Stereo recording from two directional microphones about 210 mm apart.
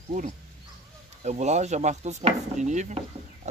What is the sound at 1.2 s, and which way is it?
Speech, 35° right (ahead or behind).